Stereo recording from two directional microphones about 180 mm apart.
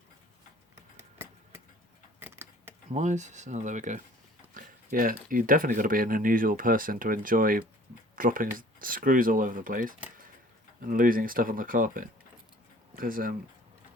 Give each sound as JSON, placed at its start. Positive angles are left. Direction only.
{"t": 2.1, "sound": "keys jangling", "side_deg": -10}
{"t": 2.9, "sound": "speech", "side_deg": -40}